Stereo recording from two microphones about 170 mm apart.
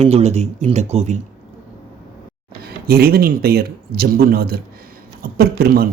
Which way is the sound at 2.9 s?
65° right (ahead or behind).